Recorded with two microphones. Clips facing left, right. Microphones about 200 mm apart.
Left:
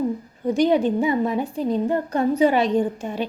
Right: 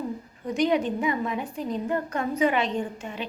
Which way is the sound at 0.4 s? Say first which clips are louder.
Left 5 dB; 35° left (ahead or behind).